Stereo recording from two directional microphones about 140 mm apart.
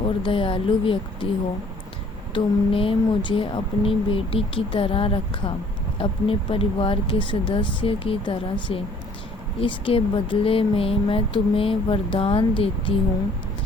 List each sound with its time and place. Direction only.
0.0 s speech: 40° left (ahead or behind)
2.3 s speech: 40° left (ahead or behind)